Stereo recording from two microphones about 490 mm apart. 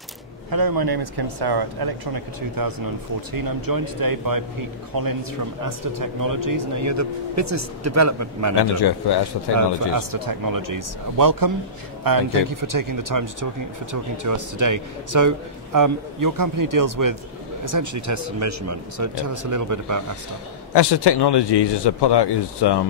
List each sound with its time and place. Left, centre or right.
0.5 s speech: right
8.5 s speech: left
9.9 s speech: right
20.7 s speech: left